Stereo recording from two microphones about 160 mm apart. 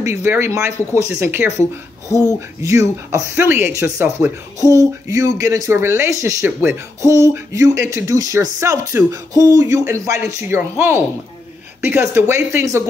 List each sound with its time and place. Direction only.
0.0 s speech: 15° right (ahead or behind)